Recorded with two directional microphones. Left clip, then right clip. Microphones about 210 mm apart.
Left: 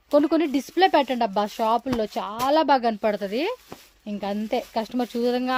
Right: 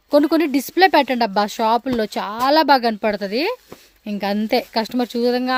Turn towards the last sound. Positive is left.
turn(degrees=-20)  # may be behind; listen again after turning